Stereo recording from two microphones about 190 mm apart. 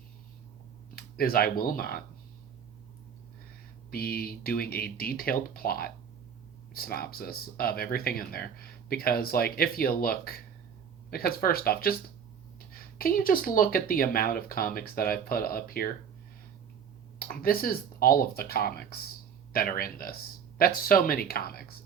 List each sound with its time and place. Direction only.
0.9 s speech: 50° left (ahead or behind)
3.9 s speech: 55° left (ahead or behind)
17.2 s speech: 50° left (ahead or behind)